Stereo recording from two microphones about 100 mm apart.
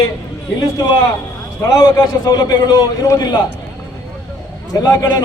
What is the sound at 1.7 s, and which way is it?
A man's voice, 45° left (ahead or behind).